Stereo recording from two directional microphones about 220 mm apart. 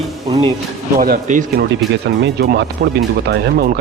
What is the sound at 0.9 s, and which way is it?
Speech, 40° right (ahead or behind).